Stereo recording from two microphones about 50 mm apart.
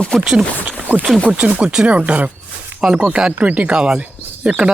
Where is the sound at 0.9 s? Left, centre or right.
Right.